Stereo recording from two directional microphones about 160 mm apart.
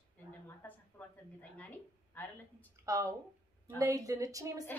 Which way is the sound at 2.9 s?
20° right (ahead or behind).